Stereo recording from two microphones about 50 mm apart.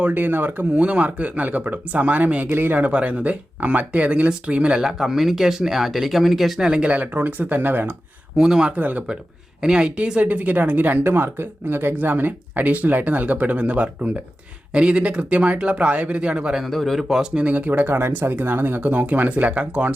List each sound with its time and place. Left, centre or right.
0.0 s speech: right
4.8 s speech: centre
6.9 s speech: right
8.4 s speech: centre
8.7 s speech: right
9.6 s speech: centre
16.6 s a man's voice: centre
17.3 s speech: right